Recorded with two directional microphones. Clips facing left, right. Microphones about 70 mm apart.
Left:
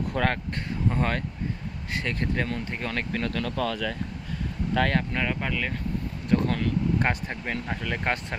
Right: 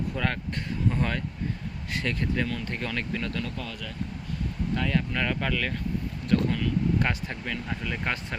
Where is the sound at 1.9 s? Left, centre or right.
Left.